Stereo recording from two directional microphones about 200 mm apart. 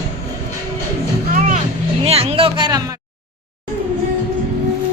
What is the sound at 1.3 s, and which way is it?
Music, 40° right (ahead or behind).